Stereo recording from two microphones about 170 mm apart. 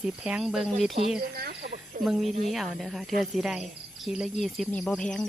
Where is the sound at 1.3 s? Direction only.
75° right (ahead or behind).